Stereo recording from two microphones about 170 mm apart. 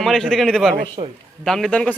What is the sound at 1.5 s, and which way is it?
Speech, 5° left (ahead or behind).